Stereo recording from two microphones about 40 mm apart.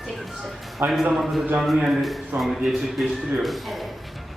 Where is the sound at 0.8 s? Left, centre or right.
Right.